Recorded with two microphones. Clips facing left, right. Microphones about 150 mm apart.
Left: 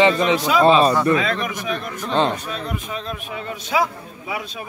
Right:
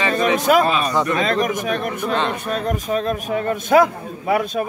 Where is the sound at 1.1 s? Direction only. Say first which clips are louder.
Right 2 dB; 40° right (ahead or behind).